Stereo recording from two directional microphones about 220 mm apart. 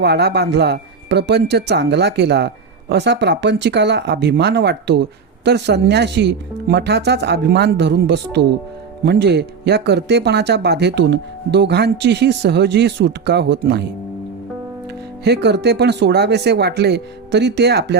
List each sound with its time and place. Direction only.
0.0 s speech: 50° right (ahead or behind)
15.2 s speech: 50° right (ahead or behind)